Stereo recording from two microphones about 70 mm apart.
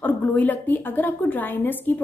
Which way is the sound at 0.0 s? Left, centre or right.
Left.